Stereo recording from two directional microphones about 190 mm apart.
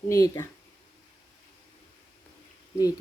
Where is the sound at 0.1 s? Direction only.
15° left (ahead or behind).